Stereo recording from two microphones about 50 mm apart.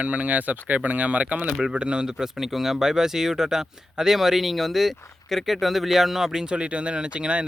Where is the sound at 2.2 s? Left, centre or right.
Centre.